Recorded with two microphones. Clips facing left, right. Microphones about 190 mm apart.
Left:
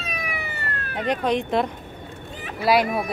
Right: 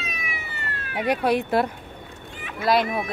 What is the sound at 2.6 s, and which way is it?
Speech, 5° left (ahead or behind).